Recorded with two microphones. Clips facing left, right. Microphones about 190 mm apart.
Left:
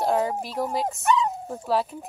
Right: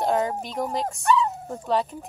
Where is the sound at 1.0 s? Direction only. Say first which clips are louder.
Right 2 dB; 20° left (ahead or behind).